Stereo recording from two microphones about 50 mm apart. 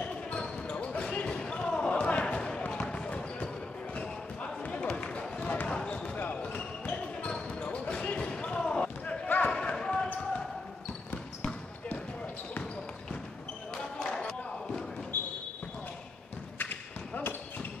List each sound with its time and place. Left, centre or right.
0.4 s basketball bounce: centre
4.6 s run: left
5.7 s basketball bounce: left
11.1 s basketball bounce: left
13.7 s a sound: centre
15.1 s basketball bounce: left
16.5 s thump: left